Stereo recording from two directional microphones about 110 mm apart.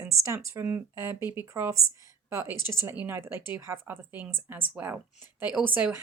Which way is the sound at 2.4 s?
40° left (ahead or behind).